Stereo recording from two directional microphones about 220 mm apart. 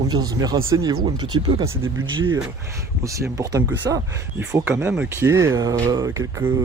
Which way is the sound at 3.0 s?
15° right (ahead or behind).